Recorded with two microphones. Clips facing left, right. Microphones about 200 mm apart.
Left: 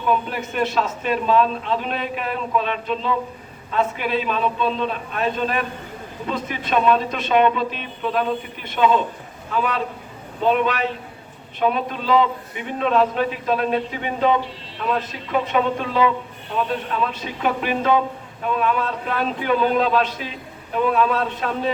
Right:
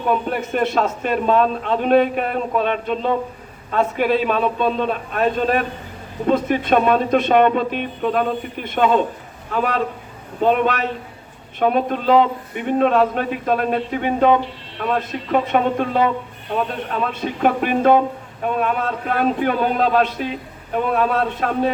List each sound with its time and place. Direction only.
0.1 s a man's voice: 50° right (ahead or behind)